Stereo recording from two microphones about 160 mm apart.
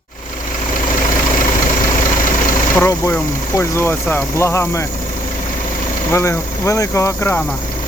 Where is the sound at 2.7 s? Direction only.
15° left (ahead or behind).